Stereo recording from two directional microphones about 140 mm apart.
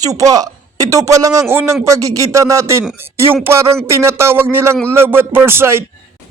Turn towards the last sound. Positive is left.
turn(degrees=-15)  # may be behind; listen again after turning